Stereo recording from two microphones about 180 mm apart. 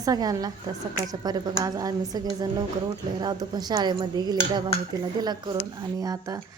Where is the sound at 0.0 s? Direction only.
20° right (ahead or behind).